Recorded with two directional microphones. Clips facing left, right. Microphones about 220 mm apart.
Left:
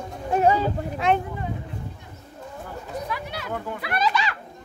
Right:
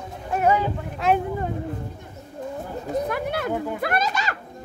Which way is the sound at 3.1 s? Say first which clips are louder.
Right 6 dB; 50° right (ahead or behind).